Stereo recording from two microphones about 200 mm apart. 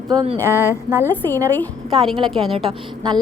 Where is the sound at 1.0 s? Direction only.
10° left (ahead or behind).